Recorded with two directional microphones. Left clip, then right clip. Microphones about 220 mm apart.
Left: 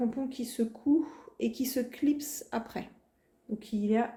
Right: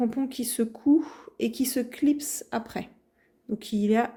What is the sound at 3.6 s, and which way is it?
Speech, 45° right (ahead or behind).